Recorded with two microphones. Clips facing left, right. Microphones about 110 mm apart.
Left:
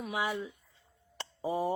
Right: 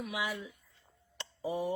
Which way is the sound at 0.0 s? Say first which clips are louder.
Left 3 dB; 35° left (ahead or behind).